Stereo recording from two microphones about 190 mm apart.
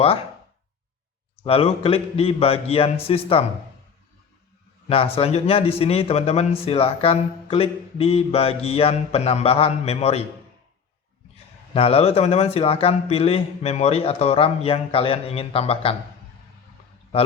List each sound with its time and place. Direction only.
1.5 s speech: 30° left (ahead or behind)
4.9 s speech: 30° left (ahead or behind)
11.7 s speech: 30° left (ahead or behind)